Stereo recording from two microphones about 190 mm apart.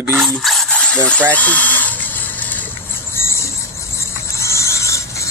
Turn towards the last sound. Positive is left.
turn(degrees=15)  # may be behind; listen again after turning